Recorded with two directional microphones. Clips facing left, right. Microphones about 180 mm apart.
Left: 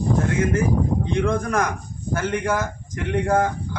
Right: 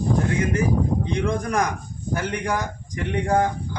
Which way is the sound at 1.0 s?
Centre (ahead or behind).